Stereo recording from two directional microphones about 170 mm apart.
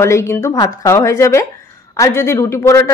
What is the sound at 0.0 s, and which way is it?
A woman's voice, 15° left (ahead or behind).